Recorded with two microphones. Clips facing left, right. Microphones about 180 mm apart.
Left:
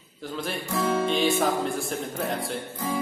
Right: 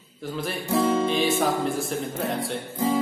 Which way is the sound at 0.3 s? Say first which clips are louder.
Right 2 dB; centre (ahead or behind).